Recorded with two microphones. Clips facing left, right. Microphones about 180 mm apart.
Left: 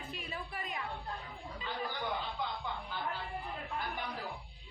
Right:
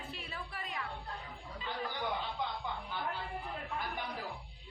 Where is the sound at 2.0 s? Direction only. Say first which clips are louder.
Right 2 dB; centre (ahead or behind).